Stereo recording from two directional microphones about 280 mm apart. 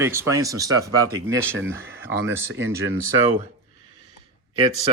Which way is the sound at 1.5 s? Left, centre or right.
Right.